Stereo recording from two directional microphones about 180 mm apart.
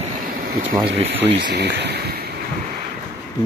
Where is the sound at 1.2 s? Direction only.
70° right (ahead or behind).